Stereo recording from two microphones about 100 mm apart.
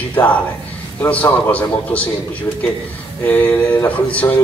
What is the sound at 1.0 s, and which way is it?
A man's voice, 15° left (ahead or behind).